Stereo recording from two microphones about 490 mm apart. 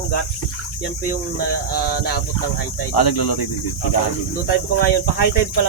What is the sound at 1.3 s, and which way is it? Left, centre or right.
Speech, centre.